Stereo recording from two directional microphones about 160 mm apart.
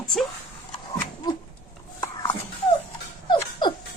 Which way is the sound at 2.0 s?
25° left (ahead or behind).